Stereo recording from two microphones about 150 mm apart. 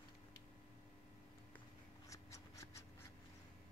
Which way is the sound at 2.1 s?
20° left (ahead or behind).